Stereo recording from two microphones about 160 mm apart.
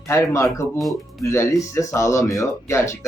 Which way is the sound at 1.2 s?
20° left (ahead or behind).